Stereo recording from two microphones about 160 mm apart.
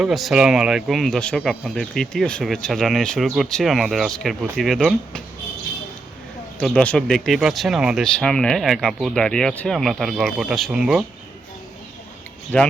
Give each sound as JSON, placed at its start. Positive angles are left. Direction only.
{"t": 0.0, "sound": "speech", "side_deg": 0}
{"t": 6.6, "sound": "speech", "side_deg": 5}
{"t": 12.5, "sound": "speech", "side_deg": 5}